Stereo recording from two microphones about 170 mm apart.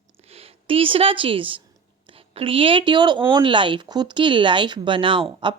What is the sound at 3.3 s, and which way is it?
Speech, 30° right (ahead or behind).